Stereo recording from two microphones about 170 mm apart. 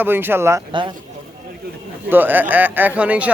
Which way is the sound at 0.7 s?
30° right (ahead or behind).